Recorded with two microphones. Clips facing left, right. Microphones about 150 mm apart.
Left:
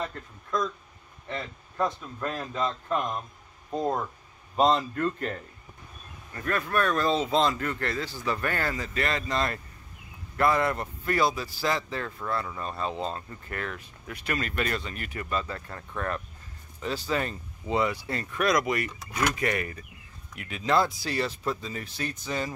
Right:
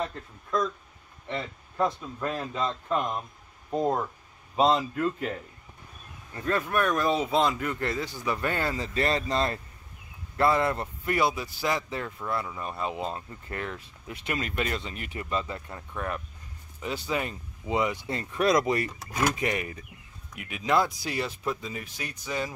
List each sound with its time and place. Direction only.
0.0 s speech: 5° right (ahead or behind)
1.8 s speech: 5° right (ahead or behind)
6.3 s speech: 20° right (ahead or behind)